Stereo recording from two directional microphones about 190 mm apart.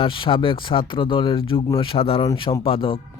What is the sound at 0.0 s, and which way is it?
Speech, 25° left (ahead or behind).